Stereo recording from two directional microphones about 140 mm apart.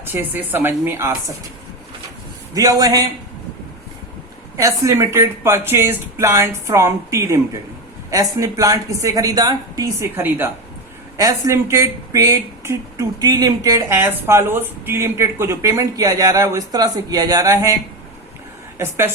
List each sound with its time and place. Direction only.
0.0 s a woman's voice: 15° right (ahead or behind)
2.6 s speech: 25° right (ahead or behind)
4.5 s speech: 20° right (ahead or behind)
18.8 s a woman's voice: 20° right (ahead or behind)